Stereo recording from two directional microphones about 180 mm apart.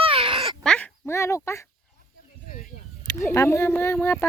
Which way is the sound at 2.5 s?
45° left (ahead or behind).